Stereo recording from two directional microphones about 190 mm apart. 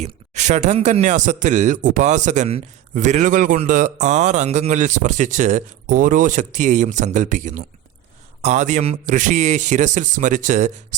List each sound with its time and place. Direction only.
0.0 s a man's voice: 40° right (ahead or behind)